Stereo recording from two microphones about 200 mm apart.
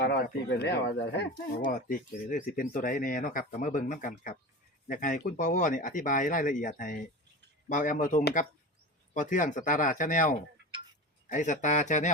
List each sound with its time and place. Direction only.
0.0 s speech: 60° left (ahead or behind); by 12.1 s 40° left (ahead or behind)